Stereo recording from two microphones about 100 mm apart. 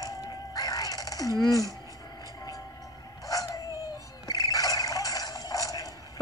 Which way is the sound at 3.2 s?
35° left (ahead or behind).